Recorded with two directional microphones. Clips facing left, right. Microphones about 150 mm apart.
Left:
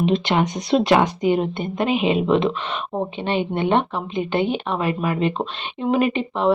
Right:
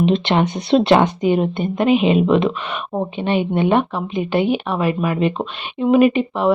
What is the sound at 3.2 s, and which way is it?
A woman's voice, 15° right (ahead or behind).